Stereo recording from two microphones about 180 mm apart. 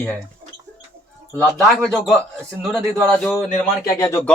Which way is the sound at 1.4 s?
5° left (ahead or behind).